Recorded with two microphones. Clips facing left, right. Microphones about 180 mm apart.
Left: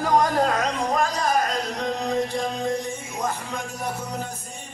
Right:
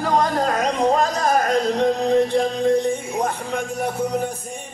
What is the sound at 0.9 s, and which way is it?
Music, 45° right (ahead or behind).